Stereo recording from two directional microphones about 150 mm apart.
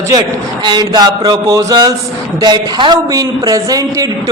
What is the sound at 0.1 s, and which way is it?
A man's voice, 25° right (ahead or behind).